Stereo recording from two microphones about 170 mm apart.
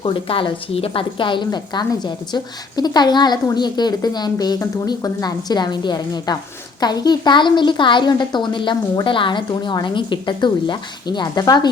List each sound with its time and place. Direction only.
0.0 s a woman's voice: 30° left (ahead or behind)